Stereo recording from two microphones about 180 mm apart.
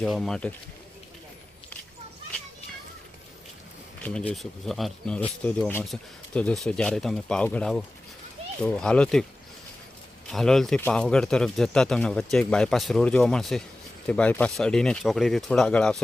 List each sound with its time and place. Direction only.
0.0 s speech: centre (ahead or behind)
4.0 s speech: 5° left (ahead or behind)
10.2 s speech: centre (ahead or behind)